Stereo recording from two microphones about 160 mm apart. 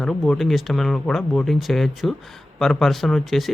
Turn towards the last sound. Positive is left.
turn(degrees=0)  # may be behind; listen again after turning